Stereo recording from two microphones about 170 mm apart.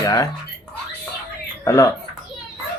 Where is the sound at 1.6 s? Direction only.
20° left (ahead or behind).